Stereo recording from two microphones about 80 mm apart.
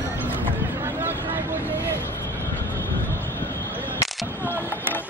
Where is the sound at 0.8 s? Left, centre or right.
Right.